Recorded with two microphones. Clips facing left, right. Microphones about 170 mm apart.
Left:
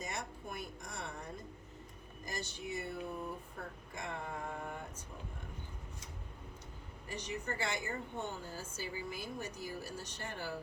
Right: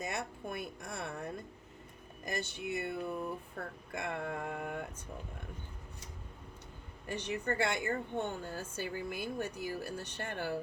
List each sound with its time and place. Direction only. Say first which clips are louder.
0.0 s a sound: right 4 dB; 60° right (ahead or behind)
2.2 s speech: right 5 dB; 60° right (ahead or behind)
7.1 s speech: right 5 dB; 60° right (ahead or behind)